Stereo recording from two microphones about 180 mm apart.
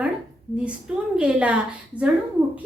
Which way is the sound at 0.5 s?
5° right (ahead or behind).